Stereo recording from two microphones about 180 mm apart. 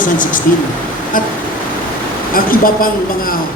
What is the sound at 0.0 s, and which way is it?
Speech, 50° left (ahead or behind).